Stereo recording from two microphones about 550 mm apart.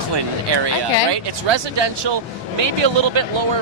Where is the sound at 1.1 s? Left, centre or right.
Right.